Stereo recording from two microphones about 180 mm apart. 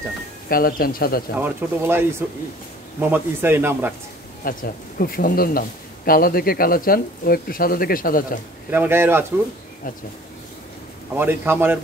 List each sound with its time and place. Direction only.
0.5 s speech: 55° left (ahead or behind)
1.4 s speech: 10° right (ahead or behind)
4.5 s speech: 55° left (ahead or behind)
8.6 s speech: 10° right (ahead or behind)
11.1 s speech: 10° right (ahead or behind)